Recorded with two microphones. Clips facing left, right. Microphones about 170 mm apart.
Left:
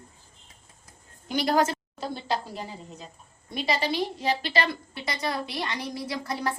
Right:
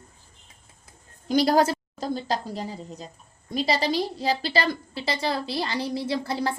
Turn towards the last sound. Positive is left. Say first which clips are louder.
# right 4 dB
turn(degrees=-30)  # may be behind; listen again after turning